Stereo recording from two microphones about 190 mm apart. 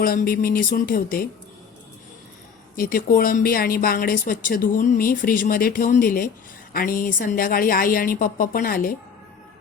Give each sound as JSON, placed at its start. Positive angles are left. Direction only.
{"t": 0.0, "sound": "a woman's voice", "side_deg": 50}
{"t": 2.7, "sound": "a woman's voice", "side_deg": 50}